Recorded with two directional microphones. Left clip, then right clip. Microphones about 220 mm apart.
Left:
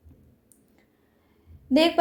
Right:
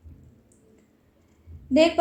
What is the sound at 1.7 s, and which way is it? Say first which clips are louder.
Speech: right 2 dB; 45° left (ahead or behind).